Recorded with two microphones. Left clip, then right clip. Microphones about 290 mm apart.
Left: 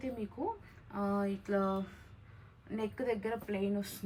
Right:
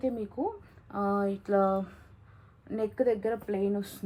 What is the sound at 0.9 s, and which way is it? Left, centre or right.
Speech, centre.